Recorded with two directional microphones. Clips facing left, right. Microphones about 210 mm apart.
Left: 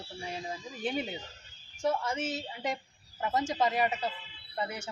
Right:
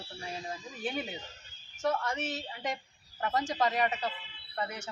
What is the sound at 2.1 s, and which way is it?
Speech, centre (ahead or behind).